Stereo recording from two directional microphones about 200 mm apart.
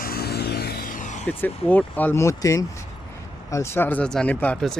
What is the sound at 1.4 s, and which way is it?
Speech, 10° left (ahead or behind).